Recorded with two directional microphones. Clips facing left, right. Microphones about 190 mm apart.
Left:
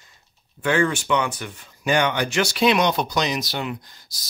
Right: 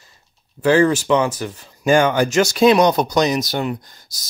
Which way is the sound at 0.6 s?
35° right (ahead or behind).